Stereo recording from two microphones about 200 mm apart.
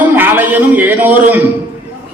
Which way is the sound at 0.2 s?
10° right (ahead or behind).